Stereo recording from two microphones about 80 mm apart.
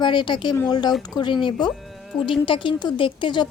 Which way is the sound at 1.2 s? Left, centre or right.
Left.